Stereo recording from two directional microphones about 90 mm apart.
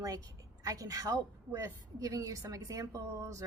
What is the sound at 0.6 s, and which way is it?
Speech, 40° right (ahead or behind).